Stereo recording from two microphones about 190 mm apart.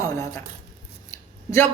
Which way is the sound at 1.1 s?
15° left (ahead or behind).